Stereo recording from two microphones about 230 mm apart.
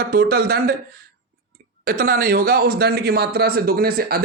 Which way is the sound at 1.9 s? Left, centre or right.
Right.